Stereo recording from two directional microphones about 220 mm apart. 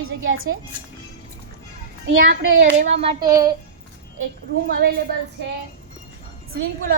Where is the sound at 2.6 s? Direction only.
30° right (ahead or behind).